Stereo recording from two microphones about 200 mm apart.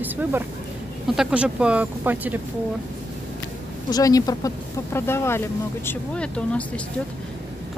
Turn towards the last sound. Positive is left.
turn(degrees=5)  # may be behind; listen again after turning